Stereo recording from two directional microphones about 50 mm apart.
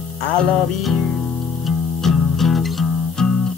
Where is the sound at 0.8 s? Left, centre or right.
Centre.